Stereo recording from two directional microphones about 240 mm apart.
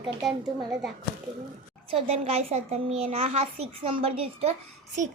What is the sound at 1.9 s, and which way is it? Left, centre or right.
A child's voice, right.